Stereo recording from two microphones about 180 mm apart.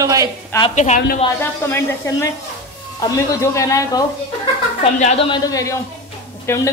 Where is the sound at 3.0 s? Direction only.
20° left (ahead or behind).